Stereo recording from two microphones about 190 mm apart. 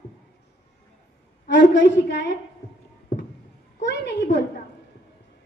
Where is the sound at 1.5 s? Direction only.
70° left (ahead or behind).